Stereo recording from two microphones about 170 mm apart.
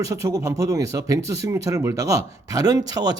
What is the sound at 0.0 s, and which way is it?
Speech, 20° right (ahead or behind).